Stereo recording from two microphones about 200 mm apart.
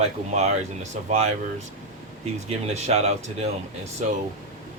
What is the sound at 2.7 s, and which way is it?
Speech, 35° right (ahead or behind).